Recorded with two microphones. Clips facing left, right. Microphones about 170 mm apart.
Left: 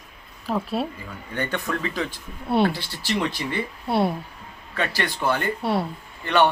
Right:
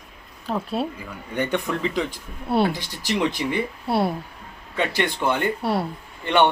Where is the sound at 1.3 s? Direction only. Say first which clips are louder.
Right 3 dB; 15° right (ahead or behind).